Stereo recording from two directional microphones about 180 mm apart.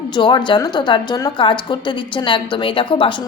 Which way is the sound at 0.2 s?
25° left (ahead or behind).